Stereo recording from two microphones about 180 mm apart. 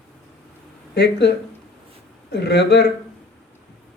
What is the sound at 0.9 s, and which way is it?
A man's voice, 70° left (ahead or behind).